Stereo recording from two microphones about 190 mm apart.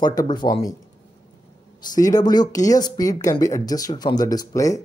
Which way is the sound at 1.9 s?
20° left (ahead or behind).